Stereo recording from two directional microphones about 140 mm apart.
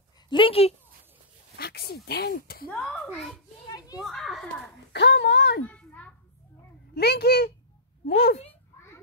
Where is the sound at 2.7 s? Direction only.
5° left (ahead or behind).